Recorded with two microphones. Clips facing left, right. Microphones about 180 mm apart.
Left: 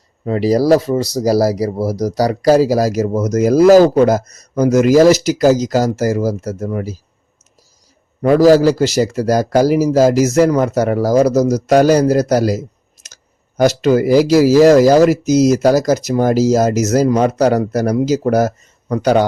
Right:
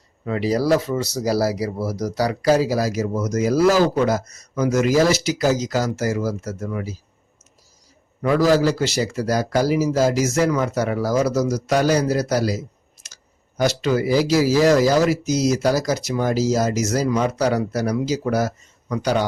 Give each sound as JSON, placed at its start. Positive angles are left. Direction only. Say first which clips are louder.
{"t": 0.3, "sound": "speech", "louder": "left 7 dB", "side_deg": 40}
{"t": 8.2, "sound": "speech", "louder": "left 8 dB", "side_deg": 40}